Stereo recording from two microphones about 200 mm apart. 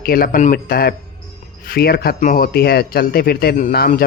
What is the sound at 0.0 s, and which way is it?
Speech, 45° left (ahead or behind).